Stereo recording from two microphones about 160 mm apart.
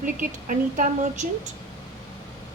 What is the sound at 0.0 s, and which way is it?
A woman's voice, 55° right (ahead or behind).